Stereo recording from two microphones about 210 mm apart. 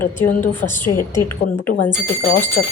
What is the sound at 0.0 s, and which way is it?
A woman's voice, 10° left (ahead or behind).